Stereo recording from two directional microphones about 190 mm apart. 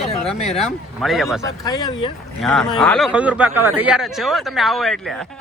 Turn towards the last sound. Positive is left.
turn(degrees=0)  # may be behind; listen again after turning